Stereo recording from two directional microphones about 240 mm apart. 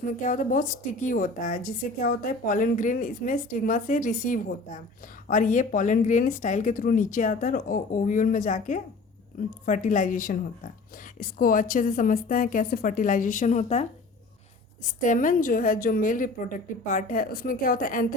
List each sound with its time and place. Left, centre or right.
0.2 s a woman's voice: left
14.8 s a woman's voice: left